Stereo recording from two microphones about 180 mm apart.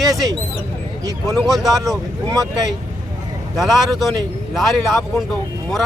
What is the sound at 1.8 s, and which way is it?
Speech, 20° right (ahead or behind).